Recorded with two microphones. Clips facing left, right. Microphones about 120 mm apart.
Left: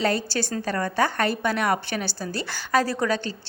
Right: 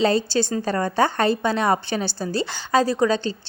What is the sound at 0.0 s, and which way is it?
A woman's voice, 25° right (ahead or behind).